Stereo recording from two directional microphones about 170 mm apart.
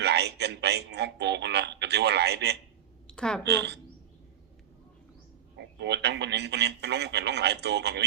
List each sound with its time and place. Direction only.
0.0 s speech: 75° right (ahead or behind)
3.1 s speech: 5° left (ahead or behind)
3.4 s speech: 85° right
5.5 s speech: 90° right